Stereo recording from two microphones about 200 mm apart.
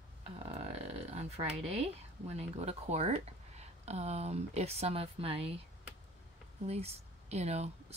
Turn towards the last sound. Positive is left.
turn(degrees=-30)  # may be behind; listen again after turning